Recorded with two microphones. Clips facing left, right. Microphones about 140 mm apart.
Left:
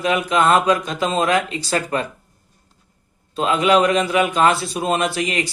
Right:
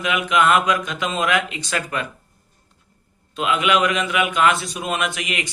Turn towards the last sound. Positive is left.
turn(degrees=35)  # may be behind; listen again after turning